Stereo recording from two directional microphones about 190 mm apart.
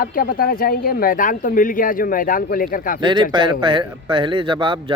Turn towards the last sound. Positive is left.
turn(degrees=-25)  # may be behind; listen again after turning